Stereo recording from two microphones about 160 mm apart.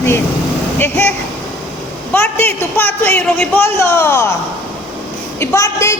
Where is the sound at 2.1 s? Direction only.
15° left (ahead or behind).